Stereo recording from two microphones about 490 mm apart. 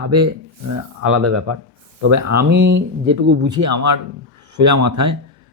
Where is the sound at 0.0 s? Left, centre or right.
Right.